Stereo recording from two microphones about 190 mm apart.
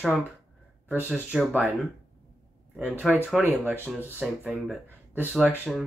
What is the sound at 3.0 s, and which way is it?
Speech, 5° right (ahead or behind).